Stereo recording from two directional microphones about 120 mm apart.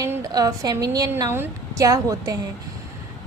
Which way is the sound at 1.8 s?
30° right (ahead or behind).